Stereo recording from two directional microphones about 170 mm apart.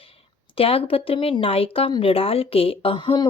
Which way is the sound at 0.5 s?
35° left (ahead or behind).